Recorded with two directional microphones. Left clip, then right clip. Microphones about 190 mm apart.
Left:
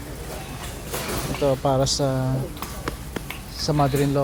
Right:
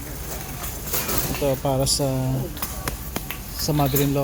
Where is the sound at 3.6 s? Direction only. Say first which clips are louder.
Left 1 dB; 20° right (ahead or behind).